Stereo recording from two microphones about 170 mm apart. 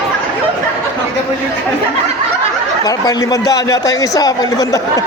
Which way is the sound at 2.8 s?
20° left (ahead or behind).